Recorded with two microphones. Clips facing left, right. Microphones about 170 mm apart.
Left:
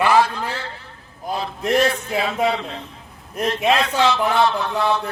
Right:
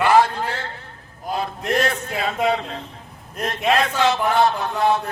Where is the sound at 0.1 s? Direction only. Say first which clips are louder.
Right 1 dB; 50° right (ahead or behind).